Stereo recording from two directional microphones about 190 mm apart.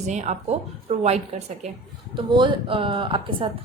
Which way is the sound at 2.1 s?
25° right (ahead or behind).